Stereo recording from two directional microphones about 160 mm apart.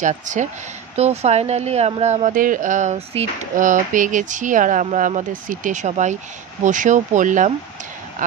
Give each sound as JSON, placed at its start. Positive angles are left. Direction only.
{"t": 0.0, "sound": "speech", "side_deg": -50}